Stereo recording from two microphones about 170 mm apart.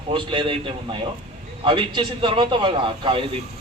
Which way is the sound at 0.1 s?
30° right (ahead or behind).